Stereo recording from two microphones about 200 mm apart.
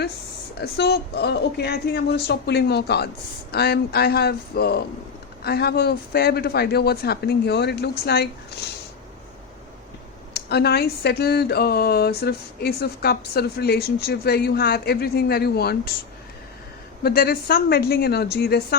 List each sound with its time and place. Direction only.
0.6 s speech: 55° left (ahead or behind)
10.3 s speech: 55° left (ahead or behind)
17.0 s speech: 50° left (ahead or behind)